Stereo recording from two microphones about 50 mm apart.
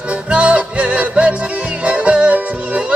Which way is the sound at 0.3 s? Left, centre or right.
Right.